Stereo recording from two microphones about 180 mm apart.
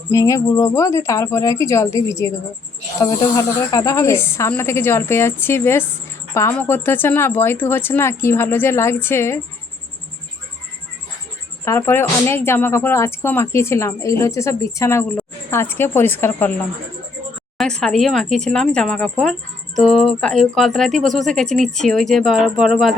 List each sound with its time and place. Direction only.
0.1 s speech: 15° left (ahead or behind)
11.6 s speech: 15° left (ahead or behind)
17.6 s speech: 5° left (ahead or behind)